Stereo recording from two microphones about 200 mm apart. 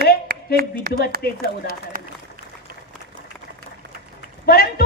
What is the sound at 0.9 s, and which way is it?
A man's voice, 50° right (ahead or behind).